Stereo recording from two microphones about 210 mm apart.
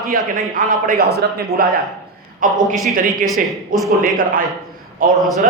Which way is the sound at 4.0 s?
40° right (ahead or behind).